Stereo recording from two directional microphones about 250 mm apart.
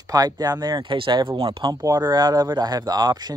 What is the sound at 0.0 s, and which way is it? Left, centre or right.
Speech, centre.